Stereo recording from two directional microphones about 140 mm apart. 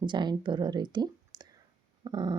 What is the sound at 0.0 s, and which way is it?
Speech, 35° right (ahead or behind).